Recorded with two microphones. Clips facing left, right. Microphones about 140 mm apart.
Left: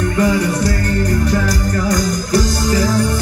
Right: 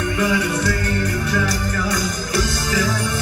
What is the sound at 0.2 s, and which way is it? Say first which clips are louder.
Music: left 5 dB; 40° left (ahead or behind).